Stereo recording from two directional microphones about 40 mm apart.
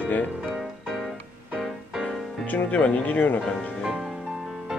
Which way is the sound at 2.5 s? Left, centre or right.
Left.